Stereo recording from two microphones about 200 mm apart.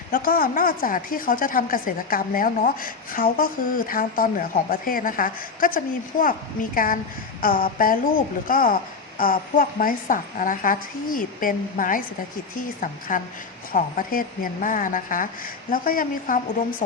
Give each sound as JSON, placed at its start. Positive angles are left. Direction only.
{"t": 0.1, "sound": "a woman's voice", "side_deg": 45}